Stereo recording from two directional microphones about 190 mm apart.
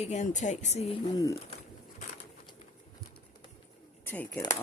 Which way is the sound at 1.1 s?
20° left (ahead or behind).